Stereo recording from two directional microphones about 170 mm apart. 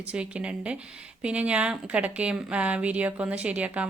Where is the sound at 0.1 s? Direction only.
5° right (ahead or behind).